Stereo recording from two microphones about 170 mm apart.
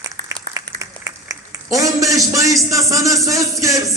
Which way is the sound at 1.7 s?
20° right (ahead or behind).